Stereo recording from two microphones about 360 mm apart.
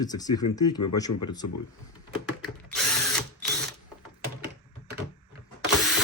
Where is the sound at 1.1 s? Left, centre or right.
Left.